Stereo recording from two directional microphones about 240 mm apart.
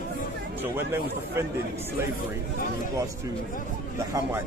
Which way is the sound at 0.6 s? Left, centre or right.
Centre.